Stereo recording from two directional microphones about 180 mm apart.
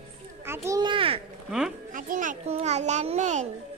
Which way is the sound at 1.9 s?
45° right (ahead or behind).